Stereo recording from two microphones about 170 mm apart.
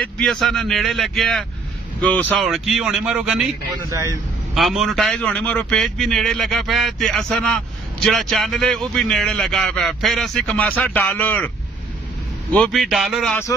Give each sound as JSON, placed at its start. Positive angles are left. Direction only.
{"t": 0.2, "sound": "a man's voice", "side_deg": 0}
{"t": 3.9, "sound": "a man's voice", "side_deg": -20}
{"t": 4.6, "sound": "a man's voice", "side_deg": 0}
{"t": 12.5, "sound": "a man's voice", "side_deg": 5}